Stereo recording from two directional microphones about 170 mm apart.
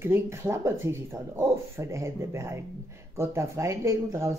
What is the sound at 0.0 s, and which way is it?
Speech, 15° right (ahead or behind).